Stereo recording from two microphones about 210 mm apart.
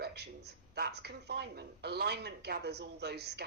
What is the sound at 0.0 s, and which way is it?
Speech, 50° right (ahead or behind).